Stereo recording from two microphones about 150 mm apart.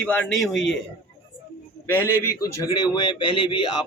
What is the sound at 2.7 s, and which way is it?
A man's voice, 30° left (ahead or behind).